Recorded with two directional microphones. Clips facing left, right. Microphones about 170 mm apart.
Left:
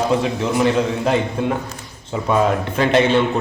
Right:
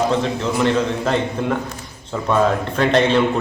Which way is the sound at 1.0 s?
5° left (ahead or behind).